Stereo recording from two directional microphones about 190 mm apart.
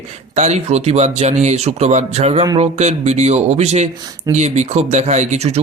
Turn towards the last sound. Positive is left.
turn(degrees=-35)  # may be behind; listen again after turning